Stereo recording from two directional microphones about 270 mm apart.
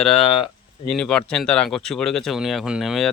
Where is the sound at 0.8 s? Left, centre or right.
Centre.